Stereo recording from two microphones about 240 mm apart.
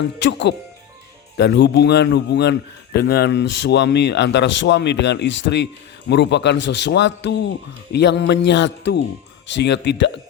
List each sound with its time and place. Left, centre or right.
0.2 s a man's voice: left